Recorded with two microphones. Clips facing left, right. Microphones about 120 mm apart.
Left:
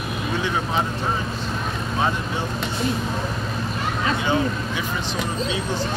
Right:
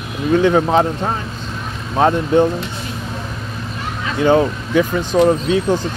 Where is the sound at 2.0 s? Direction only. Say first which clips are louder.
Right 12 dB; 55° right (ahead or behind).